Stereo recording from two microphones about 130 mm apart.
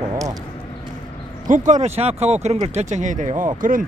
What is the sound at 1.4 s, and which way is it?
Speech, 75° right (ahead or behind).